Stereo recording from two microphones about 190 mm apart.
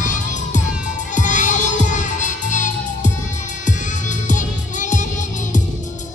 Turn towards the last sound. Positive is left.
turn(degrees=40)  # may be behind; listen again after turning